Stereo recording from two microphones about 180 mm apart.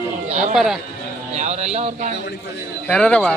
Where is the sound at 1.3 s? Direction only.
40° right (ahead or behind).